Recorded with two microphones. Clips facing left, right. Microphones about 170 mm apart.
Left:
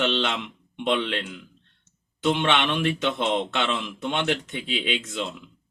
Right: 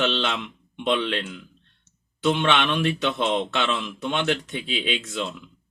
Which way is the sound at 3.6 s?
20° left (ahead or behind).